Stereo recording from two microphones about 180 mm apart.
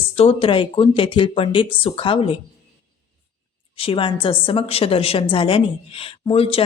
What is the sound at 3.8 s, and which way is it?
A woman's voice, 30° left (ahead or behind).